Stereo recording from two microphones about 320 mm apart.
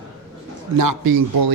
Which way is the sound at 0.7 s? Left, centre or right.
Right.